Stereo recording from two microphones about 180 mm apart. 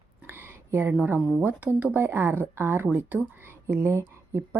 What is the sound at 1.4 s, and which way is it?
Speech, 10° right (ahead or behind).